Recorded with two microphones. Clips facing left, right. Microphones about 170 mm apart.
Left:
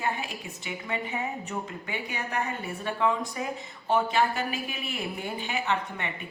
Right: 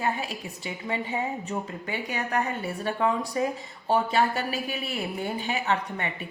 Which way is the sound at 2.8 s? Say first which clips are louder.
Right 1 dB; 40° right (ahead or behind).